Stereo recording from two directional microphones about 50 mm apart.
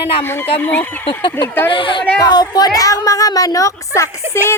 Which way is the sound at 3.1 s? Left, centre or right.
Left.